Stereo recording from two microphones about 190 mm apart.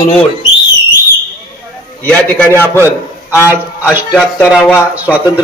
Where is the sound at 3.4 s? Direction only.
10° right (ahead or behind).